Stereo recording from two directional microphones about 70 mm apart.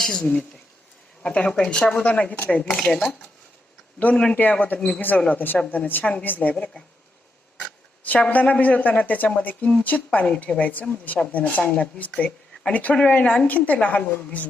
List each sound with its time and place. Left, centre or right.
0.0 s a woman's voice: centre; by 5.5 s left
5.5 s a woman's voice: centre
8.0 s a woman's voice: left
12.1 s a sound: centre
12.7 s a woman's voice: centre